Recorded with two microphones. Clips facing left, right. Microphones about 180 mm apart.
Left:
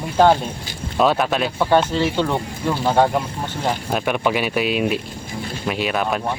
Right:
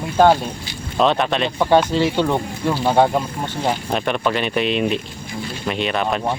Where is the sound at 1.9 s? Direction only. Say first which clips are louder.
Right 2 dB; 15° right (ahead or behind).